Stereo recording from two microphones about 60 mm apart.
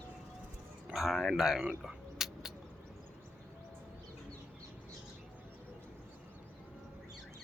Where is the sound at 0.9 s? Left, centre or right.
Centre.